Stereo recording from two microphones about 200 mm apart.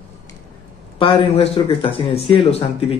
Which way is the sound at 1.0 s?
30° left (ahead or behind).